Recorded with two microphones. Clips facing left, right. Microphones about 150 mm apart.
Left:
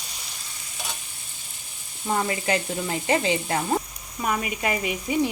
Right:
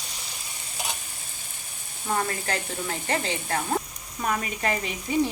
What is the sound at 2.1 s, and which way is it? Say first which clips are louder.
Sizzle: left 3 dB; 10° left (ahead or behind).